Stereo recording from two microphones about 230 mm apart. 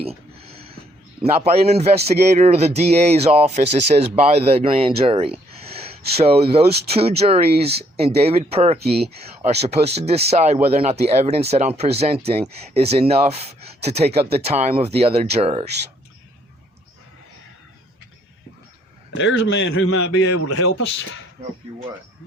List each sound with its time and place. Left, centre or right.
0.0 s a sound: right
1.2 s speech: right
6.5 s speech: right
8.8 s speech: right
9.4 s speech: right
19.1 s a man's voice: left